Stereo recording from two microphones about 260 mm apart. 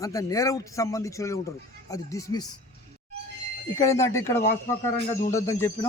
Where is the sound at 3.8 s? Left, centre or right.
Centre.